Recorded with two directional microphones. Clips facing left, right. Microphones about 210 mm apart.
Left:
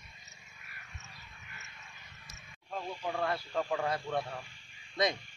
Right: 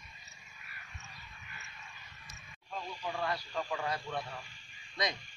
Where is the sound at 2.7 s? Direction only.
55° left (ahead or behind).